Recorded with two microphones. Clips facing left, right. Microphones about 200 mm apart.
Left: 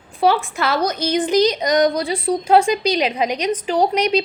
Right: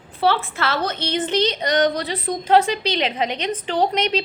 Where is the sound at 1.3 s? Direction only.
30° right (ahead or behind).